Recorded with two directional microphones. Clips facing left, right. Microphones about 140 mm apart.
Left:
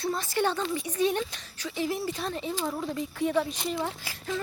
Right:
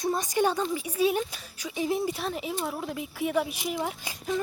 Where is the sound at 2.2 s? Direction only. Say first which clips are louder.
Even; 5° right (ahead or behind).